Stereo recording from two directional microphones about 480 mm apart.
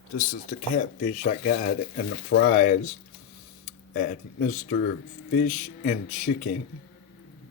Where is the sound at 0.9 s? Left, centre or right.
Centre.